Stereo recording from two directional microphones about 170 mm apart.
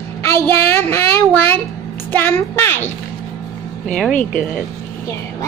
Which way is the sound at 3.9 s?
5° left (ahead or behind).